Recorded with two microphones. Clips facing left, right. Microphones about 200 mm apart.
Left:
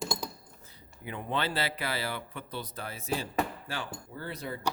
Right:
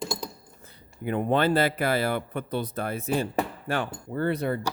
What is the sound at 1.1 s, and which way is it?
Speech, 50° right (ahead or behind).